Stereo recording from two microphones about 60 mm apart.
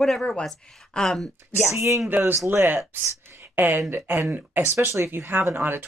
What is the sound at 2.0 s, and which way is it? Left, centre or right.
Speech, right.